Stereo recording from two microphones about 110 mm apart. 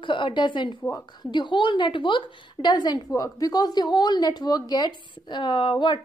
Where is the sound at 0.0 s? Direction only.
45° left (ahead or behind).